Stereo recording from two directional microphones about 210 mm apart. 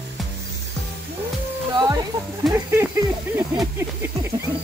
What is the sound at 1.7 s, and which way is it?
Music, 20° right (ahead or behind).